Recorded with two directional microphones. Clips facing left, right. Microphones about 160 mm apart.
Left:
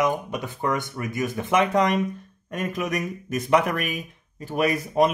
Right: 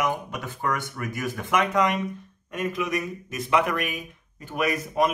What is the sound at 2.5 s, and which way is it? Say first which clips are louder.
Speech: even; 45° left (ahead or behind).